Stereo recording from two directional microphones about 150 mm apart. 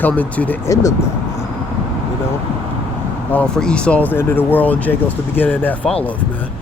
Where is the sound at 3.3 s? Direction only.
5° left (ahead or behind).